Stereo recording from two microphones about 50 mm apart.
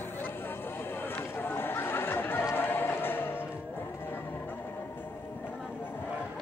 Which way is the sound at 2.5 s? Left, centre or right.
Left.